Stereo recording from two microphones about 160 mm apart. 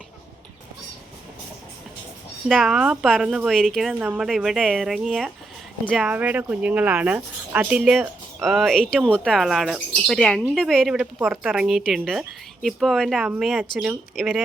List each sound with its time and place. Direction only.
2.5 s speech: centre (ahead or behind)